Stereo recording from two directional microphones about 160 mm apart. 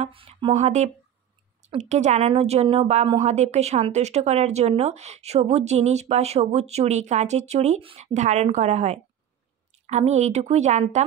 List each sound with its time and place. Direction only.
0.0 s a woman's voice: 40° right (ahead or behind)